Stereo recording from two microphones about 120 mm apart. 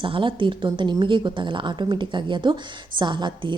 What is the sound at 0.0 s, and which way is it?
A woman's voice, 45° right (ahead or behind).